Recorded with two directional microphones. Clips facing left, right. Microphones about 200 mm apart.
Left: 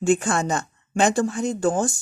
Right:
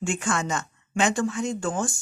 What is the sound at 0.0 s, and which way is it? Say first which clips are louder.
Speech: left 7 dB; 35° left (ahead or behind).